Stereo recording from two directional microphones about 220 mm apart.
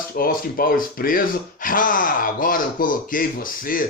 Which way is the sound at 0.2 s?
40° left (ahead or behind).